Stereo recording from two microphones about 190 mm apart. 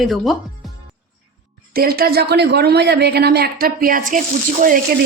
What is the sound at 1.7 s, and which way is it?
Speech, 50° right (ahead or behind).